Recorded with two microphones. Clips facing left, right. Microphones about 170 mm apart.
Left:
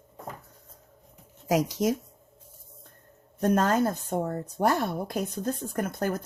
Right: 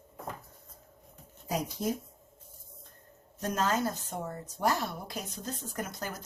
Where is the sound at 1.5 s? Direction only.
90° left.